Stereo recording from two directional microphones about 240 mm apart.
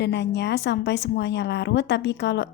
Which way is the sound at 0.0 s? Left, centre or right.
Left.